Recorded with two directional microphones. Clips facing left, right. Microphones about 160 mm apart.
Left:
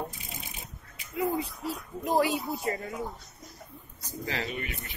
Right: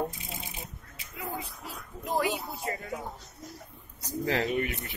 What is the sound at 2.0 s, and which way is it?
Speech, 30° left (ahead or behind).